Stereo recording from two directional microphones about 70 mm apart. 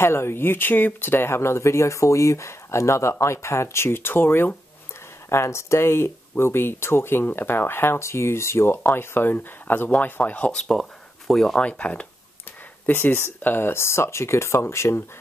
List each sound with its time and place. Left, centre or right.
0.0 s speech: left; by 10.5 s centre
10.5 s speech: centre
11.6 s speech: centre
12.8 s speech: left